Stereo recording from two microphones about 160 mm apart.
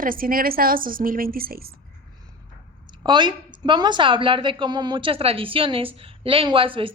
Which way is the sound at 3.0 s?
30° right (ahead or behind).